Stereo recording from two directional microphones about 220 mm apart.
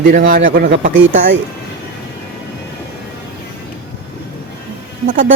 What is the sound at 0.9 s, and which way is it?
Speech, 60° right (ahead or behind).